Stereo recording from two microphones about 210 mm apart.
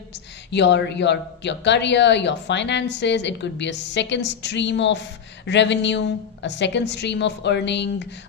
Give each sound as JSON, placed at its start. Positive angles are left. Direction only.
{"t": 0.1, "sound": "a woman's voice", "side_deg": 55}